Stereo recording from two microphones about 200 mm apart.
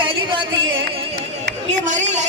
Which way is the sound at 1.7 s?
40° right (ahead or behind).